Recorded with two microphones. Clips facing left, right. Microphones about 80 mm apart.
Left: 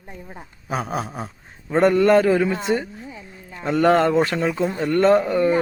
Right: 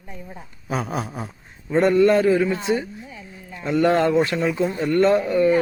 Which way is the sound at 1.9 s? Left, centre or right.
Left.